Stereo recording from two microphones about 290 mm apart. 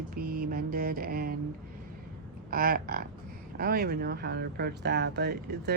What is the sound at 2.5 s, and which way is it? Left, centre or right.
Speech, right.